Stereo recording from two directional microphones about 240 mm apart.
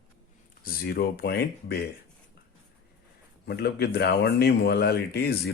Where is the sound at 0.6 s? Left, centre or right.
Left.